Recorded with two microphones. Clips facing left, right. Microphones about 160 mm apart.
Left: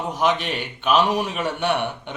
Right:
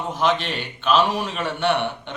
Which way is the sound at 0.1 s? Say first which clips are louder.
Even; 15° left (ahead or behind).